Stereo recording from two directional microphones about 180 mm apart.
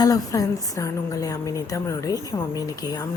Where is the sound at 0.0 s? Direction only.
20° left (ahead or behind).